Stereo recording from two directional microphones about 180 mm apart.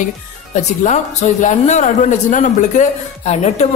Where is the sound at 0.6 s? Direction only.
40° left (ahead or behind).